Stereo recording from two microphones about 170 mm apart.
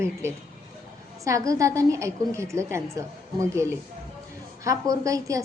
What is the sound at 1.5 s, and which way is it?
A woman's voice, 20° right (ahead or behind).